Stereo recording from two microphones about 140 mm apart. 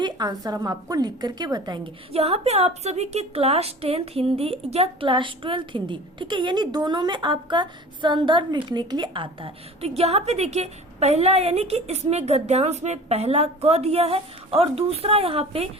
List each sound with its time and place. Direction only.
0.0 s a woman's voice: 30° right (ahead or behind)
2.1 s a woman's voice: 50° right (ahead or behind)